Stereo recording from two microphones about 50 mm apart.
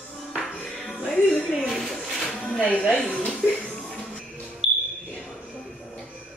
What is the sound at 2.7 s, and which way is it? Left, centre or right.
Speech, left.